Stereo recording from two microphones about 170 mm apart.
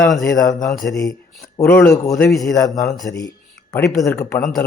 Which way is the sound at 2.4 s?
20° left (ahead or behind).